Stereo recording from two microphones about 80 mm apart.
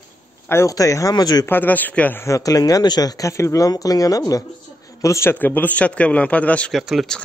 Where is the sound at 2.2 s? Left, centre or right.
Left.